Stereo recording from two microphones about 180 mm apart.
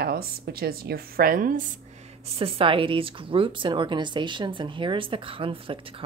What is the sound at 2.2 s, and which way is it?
Speech, 35° right (ahead or behind).